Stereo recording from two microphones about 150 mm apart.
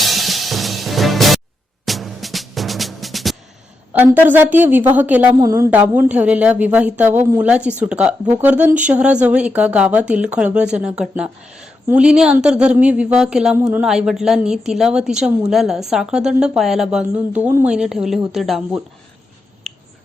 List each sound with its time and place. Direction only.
0.0 s music: centre (ahead or behind)
3.9 s speech: 10° right (ahead or behind)
5.4 s a woman's voice: 20° right (ahead or behind)
5.7 s a woman's voice: 10° right (ahead or behind)
19.6 s finger snapping: centre (ahead or behind)